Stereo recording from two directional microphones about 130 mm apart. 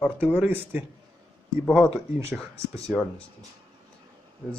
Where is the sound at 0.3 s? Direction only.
15° right (ahead or behind).